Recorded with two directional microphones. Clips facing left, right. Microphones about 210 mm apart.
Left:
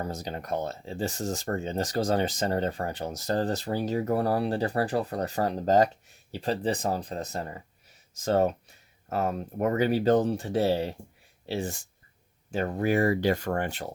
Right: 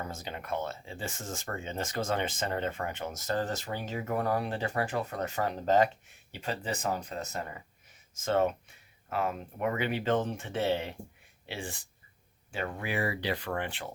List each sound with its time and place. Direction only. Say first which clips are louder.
0.0 s speech: left 5 dB; 40° left (ahead or behind)